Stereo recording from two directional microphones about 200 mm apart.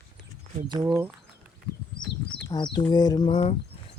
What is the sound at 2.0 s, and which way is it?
Speech, 20° left (ahead or behind).